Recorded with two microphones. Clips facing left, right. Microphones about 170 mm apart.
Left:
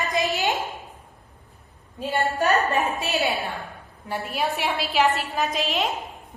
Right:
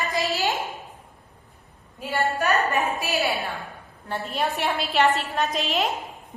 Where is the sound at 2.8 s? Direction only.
20° left (ahead or behind).